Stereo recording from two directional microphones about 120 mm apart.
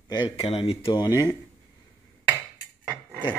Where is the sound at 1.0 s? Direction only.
30° left (ahead or behind).